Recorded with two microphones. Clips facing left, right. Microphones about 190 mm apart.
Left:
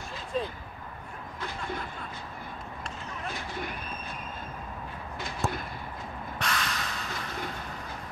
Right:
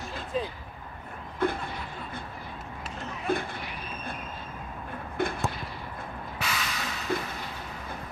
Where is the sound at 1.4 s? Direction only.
55° right (ahead or behind).